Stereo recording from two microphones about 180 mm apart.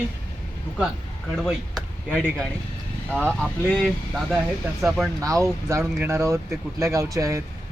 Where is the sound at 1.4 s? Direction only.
Centre (ahead or behind).